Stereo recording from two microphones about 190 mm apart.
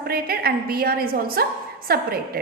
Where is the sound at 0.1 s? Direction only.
55° right (ahead or behind).